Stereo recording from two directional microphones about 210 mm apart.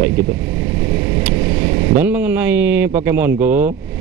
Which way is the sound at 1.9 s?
5° right (ahead or behind).